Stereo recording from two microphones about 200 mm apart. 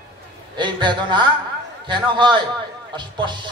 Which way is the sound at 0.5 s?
25° right (ahead or behind).